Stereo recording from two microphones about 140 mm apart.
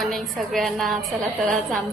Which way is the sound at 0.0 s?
Centre (ahead or behind).